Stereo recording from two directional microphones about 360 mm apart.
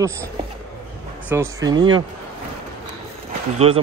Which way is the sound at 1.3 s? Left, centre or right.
Centre.